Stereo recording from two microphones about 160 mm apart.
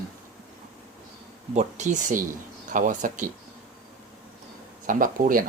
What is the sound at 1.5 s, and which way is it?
Speech, 50° right (ahead or behind).